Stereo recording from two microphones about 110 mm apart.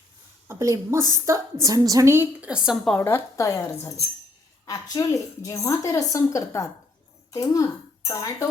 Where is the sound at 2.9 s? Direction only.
25° left (ahead or behind).